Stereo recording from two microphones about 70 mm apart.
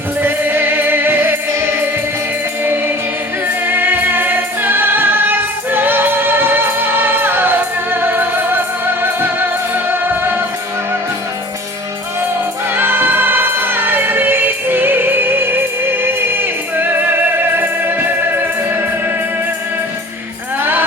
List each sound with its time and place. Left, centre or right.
0.2 s music: right
3.4 s music: right
12.7 s music: right
20.6 s music: right